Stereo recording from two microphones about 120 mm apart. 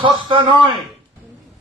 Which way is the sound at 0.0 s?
45° right (ahead or behind).